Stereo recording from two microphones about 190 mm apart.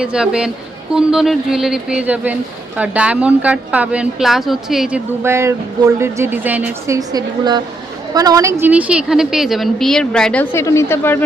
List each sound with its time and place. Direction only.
0.0 s speech: 5° right (ahead or behind)
5.2 s a woman's voice: 15° right (ahead or behind)
8.6 s speech: 5° right (ahead or behind); by 11.2 s 10° left (ahead or behind)